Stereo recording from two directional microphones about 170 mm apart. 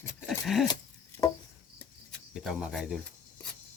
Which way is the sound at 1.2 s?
20° left (ahead or behind).